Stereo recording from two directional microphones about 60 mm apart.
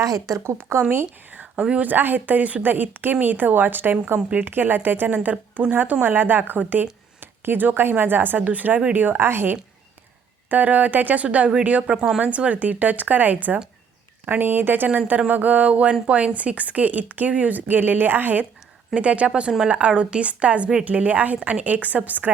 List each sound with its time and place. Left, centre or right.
0.0 s speech: right
0.4 s speech: right
0.8 s speech: right; by 1.9 s centre
1.9 s speech: right
10.5 s speech: right
18.9 s speech: right